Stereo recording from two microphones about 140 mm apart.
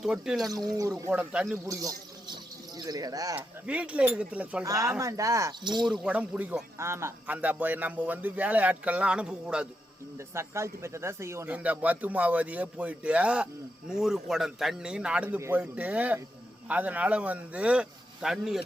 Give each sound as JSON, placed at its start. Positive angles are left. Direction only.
{"t": 0.0, "sound": "a man's voice", "side_deg": -5}
{"t": 0.7, "sound": "speech", "side_deg": -20}
{"t": 1.1, "sound": "speech", "side_deg": -10}
{"t": 1.6, "sound": "speech", "side_deg": -25}
{"t": 3.7, "sound": "speech", "side_deg": -10}
{"t": 4.6, "sound": "speech", "side_deg": -25}
{"t": 5.8, "sound": "speech", "side_deg": 0}
{"t": 10.3, "sound": "a man's voice", "side_deg": -20}